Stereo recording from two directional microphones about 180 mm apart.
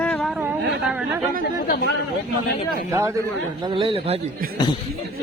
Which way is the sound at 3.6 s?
30° right (ahead or behind).